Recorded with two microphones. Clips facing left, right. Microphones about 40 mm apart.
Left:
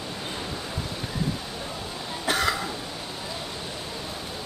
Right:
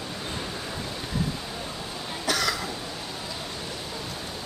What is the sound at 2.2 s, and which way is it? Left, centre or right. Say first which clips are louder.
Cough: left 2 dB; left.